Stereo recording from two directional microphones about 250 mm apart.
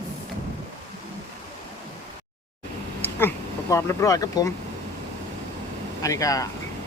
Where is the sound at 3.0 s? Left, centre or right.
Centre.